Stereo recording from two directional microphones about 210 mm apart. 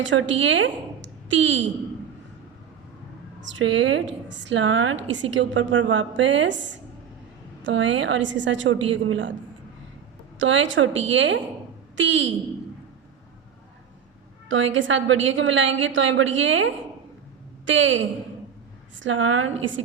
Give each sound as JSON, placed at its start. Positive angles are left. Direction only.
{"t": 0.0, "sound": "a woman's voice", "side_deg": -65}
{"t": 3.4, "sound": "a woman's voice", "side_deg": -60}
{"t": 10.3, "sound": "a woman's voice", "side_deg": -65}
{"t": 14.4, "sound": "a woman's voice", "side_deg": -65}